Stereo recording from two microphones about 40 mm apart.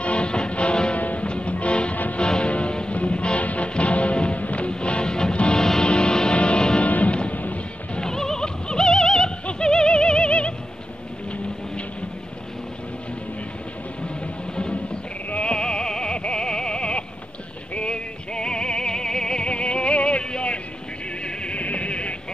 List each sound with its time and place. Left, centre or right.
0.0 s music: left
0.9 s music: left
6.8 s music: left
7.9 s music: centre
14.0 s music: left